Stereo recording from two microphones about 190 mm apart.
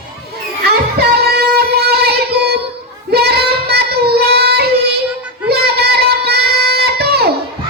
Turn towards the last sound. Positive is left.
turn(degrees=-55)  # may be behind; listen again after turning